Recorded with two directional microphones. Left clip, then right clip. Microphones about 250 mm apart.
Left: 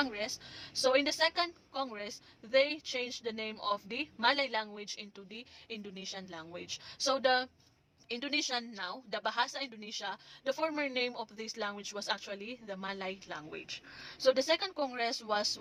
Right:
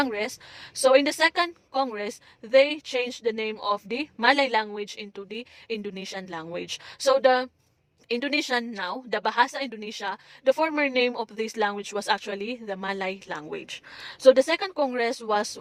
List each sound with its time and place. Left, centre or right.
0.0 s a woman's voice: right
8.0 s a woman's voice: right